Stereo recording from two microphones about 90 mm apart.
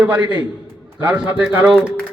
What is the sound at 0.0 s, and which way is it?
A man's voice, 15° right (ahead or behind).